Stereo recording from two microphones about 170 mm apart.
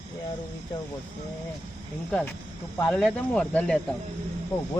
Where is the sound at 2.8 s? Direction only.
5° left (ahead or behind).